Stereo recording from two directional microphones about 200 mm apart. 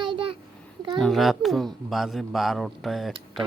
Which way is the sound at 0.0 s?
25° right (ahead or behind).